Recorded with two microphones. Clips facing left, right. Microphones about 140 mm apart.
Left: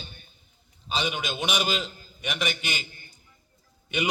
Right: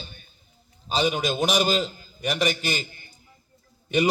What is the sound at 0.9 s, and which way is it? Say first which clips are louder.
A man's voice: right 6 dB; 40° right (ahead or behind).